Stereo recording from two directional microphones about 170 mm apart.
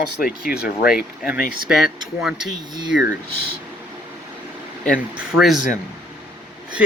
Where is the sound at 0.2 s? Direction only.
60° left (ahead or behind).